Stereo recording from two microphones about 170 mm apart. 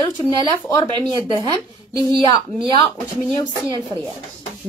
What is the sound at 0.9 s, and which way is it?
A woman's voice, 30° right (ahead or behind).